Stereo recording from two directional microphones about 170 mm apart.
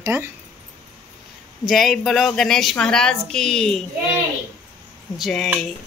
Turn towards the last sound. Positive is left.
turn(degrees=0)  # may be behind; listen again after turning